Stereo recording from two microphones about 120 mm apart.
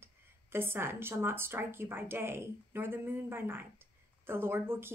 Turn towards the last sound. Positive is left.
turn(degrees=-20)  # may be behind; listen again after turning